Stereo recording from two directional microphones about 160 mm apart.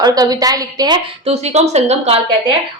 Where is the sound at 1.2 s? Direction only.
40° right (ahead or behind).